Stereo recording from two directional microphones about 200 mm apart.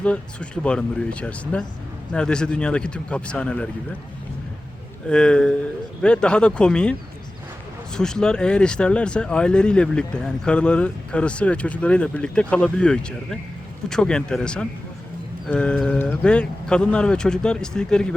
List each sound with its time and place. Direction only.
0.0 s speech: 5° left (ahead or behind)
5.0 s speech: 5° left (ahead or behind)
7.9 s speech: 5° left (ahead or behind)